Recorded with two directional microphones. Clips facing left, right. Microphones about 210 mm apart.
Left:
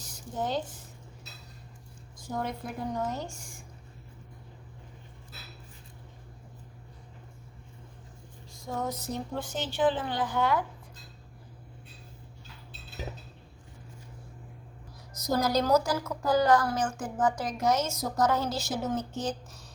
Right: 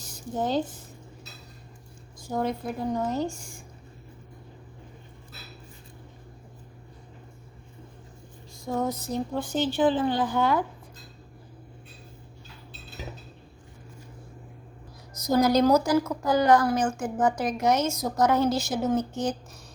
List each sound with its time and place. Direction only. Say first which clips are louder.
0.0 s a sound: right 4 dB; 30° right (ahead or behind)
2.3 s speech: right 6 dB; 30° right (ahead or behind)
8.9 s speech: right 5 dB; 30° right (ahead or behind)
15.2 s a woman's voice: right 6 dB; 15° right (ahead or behind)